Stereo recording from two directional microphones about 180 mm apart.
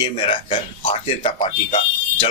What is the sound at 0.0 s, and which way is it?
Speech, 30° left (ahead or behind).